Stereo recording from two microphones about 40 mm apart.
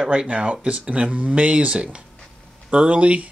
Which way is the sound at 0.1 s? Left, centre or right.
Right.